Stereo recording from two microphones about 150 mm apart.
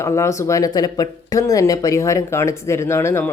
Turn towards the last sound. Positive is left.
turn(degrees=15)  # may be behind; listen again after turning